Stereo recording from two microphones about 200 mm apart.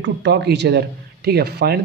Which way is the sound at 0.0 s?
60° right (ahead or behind).